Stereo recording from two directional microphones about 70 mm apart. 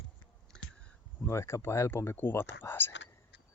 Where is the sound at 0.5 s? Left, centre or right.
Centre.